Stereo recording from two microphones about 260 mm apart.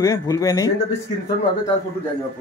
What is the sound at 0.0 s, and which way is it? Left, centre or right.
Speech, centre.